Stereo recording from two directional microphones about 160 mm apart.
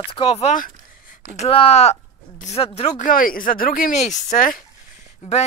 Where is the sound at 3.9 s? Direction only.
45° left (ahead or behind).